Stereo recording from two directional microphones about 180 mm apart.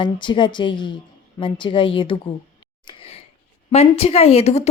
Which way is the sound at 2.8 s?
30° left (ahead or behind).